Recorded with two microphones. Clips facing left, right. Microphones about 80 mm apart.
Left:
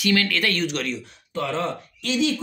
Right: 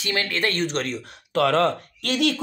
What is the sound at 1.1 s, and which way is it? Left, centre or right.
Speech, right.